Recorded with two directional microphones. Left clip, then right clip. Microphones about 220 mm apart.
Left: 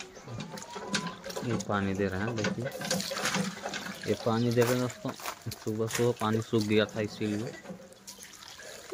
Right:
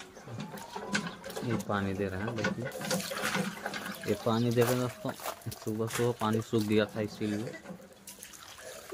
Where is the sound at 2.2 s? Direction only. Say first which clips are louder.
Left 1 dB; 15° left (ahead or behind).